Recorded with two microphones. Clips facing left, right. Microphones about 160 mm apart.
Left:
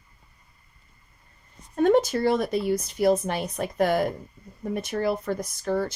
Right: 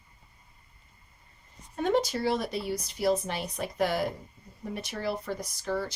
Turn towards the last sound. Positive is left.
turn(degrees=50)  # may be behind; listen again after turning